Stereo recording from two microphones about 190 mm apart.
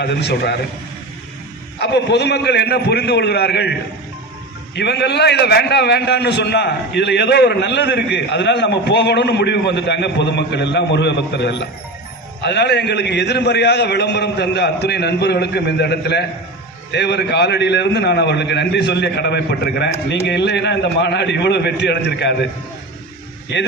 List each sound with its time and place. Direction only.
0.0 s a man's voice: 65° left (ahead or behind)
1.8 s a man's voice: 65° left (ahead or behind)
23.5 s a man's voice: 65° left (ahead or behind)